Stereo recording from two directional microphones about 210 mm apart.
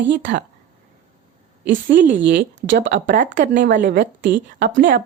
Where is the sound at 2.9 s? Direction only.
40° right (ahead or behind).